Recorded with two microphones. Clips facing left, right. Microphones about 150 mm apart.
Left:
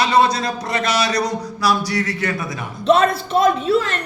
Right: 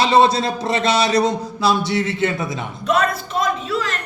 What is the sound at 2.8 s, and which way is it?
Speech, 30° left (ahead or behind).